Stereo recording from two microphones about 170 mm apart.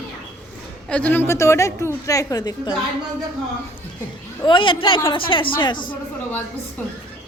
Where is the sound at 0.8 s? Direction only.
5° left (ahead or behind); by 2.7 s 25° left (ahead or behind).